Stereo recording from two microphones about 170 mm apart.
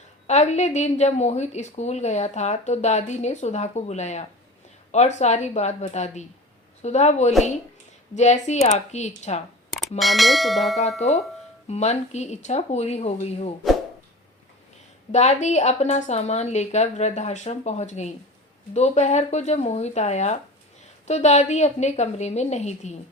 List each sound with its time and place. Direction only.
0.3 s a woman's voice: 40° left (ahead or behind)
10.0 s bell: centre (ahead or behind)
11.0 s a woman's voice: 40° left (ahead or behind)
15.1 s a woman's voice: 40° left (ahead or behind)